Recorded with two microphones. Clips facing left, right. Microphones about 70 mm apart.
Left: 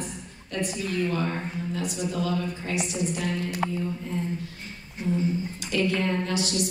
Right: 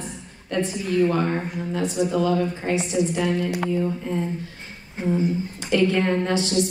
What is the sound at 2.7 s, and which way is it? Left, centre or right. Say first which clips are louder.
Speech: right 5 dB; right.